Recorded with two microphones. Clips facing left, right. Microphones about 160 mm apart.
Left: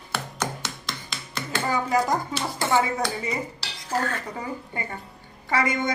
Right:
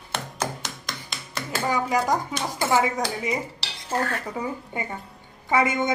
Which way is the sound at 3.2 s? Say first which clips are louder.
Right 2 dB; 25° right (ahead or behind).